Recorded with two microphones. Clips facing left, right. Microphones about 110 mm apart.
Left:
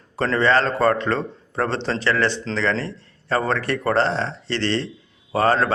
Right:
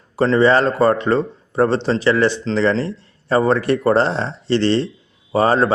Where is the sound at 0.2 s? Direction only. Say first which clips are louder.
Right 5 dB; 10° right (ahead or behind).